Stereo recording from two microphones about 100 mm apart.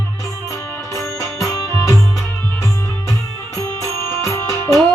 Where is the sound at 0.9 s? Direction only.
30° left (ahead or behind).